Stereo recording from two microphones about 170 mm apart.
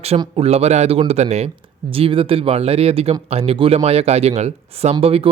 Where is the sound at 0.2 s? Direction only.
35° right (ahead or behind).